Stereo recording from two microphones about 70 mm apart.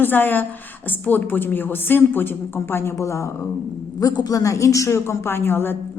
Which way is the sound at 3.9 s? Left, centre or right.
Left.